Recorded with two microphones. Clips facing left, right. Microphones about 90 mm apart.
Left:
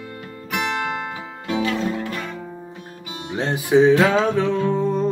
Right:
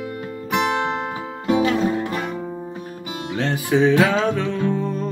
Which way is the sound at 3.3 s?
15° left (ahead or behind).